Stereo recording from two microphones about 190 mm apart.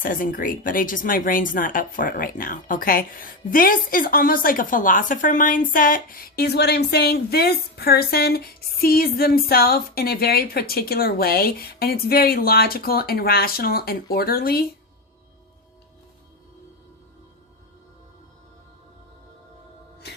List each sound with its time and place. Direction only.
0.0 s speech: 45° left (ahead or behind)
20.0 s music: 60° left (ahead or behind)